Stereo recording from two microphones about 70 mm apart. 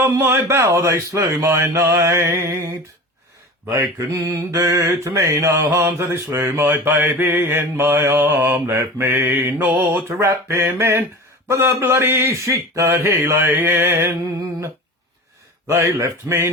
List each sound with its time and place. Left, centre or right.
0.0 s speech: right
2.2 s mantra: right
3.7 s mantra: right
10.1 s speech: right
15.6 s mantra: right